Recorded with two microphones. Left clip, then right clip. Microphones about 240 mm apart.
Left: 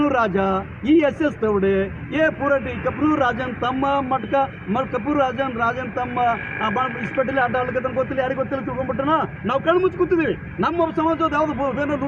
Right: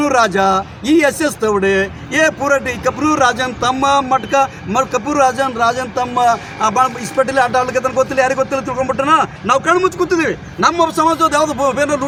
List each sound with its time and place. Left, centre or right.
0.0 s speech: right